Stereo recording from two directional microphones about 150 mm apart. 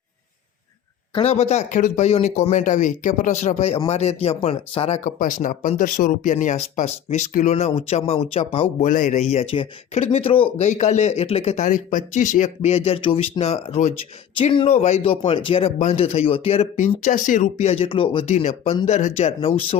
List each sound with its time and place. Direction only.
1.1 s speech: 45° left (ahead or behind)
5.0 s speech: 60° left (ahead or behind); by 8.7 s 40° left (ahead or behind)
8.8 s speech: 60° left (ahead or behind); by 10.7 s 35° left (ahead or behind)
10.7 s speech: 50° left (ahead or behind)